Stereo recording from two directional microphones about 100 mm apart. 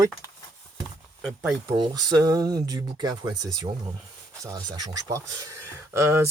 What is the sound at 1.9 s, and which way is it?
Speech, 35° right (ahead or behind).